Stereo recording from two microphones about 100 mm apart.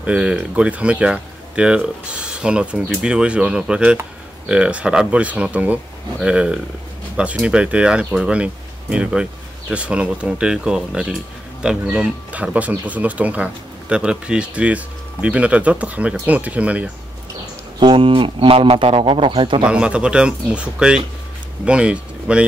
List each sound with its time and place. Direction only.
0.0 s speech: 10° right (ahead or behind)
17.7 s speech: 55° right (ahead or behind)
19.6 s speech: 10° right (ahead or behind)